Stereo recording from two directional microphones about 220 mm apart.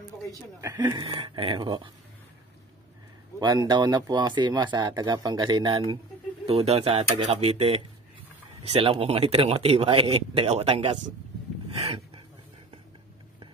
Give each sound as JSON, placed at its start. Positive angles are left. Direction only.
{"t": 0.6, "sound": "speech", "side_deg": -15}
{"t": 3.3, "sound": "speech", "side_deg": -20}